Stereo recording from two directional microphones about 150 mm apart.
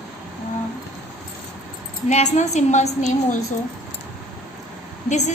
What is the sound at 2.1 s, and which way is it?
A woman's voice, 50° left (ahead or behind).